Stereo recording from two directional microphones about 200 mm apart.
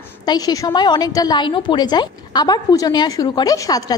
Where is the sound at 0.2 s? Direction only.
20° left (ahead or behind).